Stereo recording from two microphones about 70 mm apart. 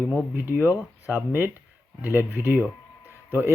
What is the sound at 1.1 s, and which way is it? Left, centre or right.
Speech, right.